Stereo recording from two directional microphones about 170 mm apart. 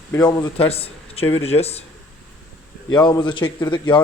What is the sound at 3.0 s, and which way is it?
Speech, 25° left (ahead or behind).